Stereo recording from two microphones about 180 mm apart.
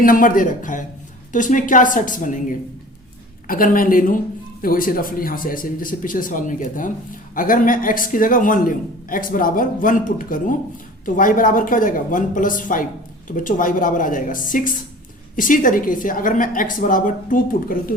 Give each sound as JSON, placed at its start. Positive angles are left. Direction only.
{"t": 0.0, "sound": "speech", "side_deg": 50}